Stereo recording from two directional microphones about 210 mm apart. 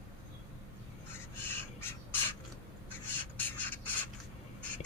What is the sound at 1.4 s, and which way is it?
Gasp, 10° left (ahead or behind).